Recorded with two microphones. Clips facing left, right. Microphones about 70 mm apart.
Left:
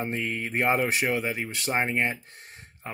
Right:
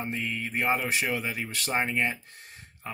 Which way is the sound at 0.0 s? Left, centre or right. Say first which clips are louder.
Left 2 dB; left.